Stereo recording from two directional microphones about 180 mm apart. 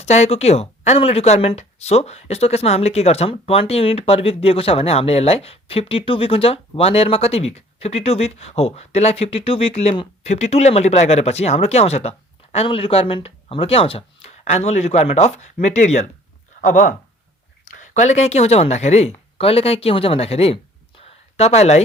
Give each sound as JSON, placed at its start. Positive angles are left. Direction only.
{"t": 0.0, "sound": "speech", "side_deg": 35}
{"t": 17.9, "sound": "speech", "side_deg": 40}